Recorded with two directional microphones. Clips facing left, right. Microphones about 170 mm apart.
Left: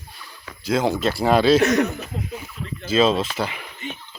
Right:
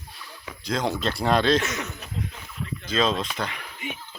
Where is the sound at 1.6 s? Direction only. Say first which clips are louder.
Left 13 dB; 60° left (ahead or behind).